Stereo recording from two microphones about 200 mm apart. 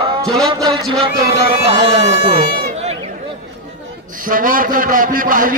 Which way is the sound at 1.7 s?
25° right (ahead or behind).